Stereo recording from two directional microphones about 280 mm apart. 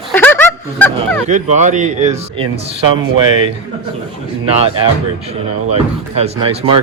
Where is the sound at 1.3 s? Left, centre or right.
Right.